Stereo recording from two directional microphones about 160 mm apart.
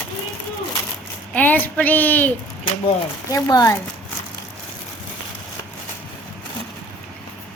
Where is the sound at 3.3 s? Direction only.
20° left (ahead or behind).